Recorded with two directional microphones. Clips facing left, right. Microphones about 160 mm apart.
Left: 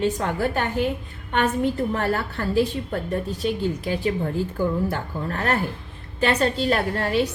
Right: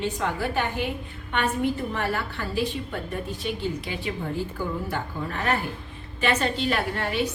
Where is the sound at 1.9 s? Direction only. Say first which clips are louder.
Left 4 dB; 45° left (ahead or behind).